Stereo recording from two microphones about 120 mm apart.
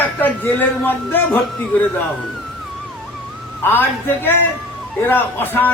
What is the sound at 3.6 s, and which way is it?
A man's voice, 20° left (ahead or behind).